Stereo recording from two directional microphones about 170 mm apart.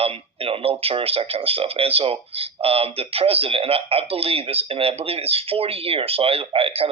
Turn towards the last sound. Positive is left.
turn(degrees=-35)  # may be behind; listen again after turning